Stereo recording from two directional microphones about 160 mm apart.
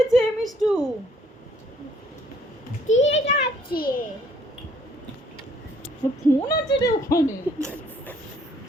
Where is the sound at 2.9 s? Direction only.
45° left (ahead or behind).